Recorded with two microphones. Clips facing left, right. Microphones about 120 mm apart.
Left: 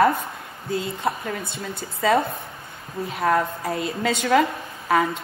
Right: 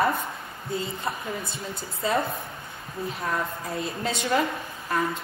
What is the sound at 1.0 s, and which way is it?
Speech, 65° left (ahead or behind).